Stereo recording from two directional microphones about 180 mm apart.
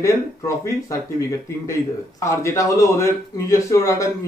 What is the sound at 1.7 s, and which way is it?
Speech, 15° left (ahead or behind).